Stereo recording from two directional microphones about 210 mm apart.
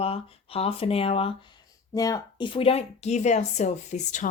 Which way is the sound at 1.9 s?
15° left (ahead or behind).